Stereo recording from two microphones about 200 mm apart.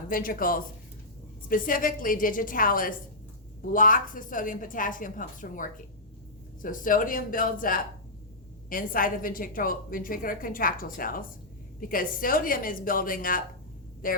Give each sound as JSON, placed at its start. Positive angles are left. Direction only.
{"t": 0.1, "sound": "a woman's voice", "side_deg": 45}